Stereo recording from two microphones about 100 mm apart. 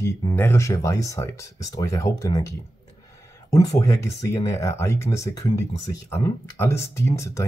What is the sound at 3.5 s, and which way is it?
Speech, 30° left (ahead or behind).